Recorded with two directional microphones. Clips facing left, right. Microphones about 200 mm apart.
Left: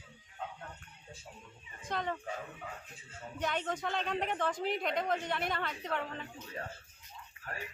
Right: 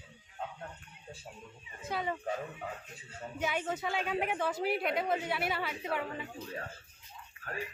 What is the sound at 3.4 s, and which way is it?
A woman's voice, 5° right (ahead or behind).